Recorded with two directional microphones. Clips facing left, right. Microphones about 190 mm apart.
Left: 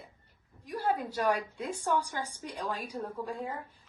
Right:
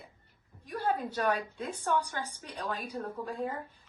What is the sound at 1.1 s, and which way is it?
Speech, 15° left (ahead or behind).